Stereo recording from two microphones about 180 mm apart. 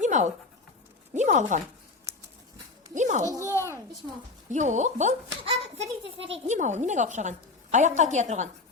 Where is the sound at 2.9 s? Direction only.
45° right (ahead or behind).